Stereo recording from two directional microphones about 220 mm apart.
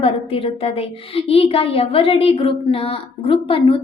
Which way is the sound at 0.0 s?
25° left (ahead or behind).